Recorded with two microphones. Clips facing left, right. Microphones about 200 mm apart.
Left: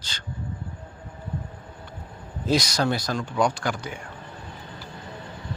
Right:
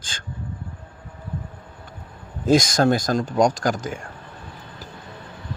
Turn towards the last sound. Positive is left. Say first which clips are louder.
# right 5 dB
turn(degrees=-45)  # may be behind; listen again after turning